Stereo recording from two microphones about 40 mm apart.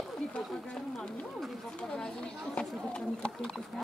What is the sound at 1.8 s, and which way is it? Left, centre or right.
Chatter, centre.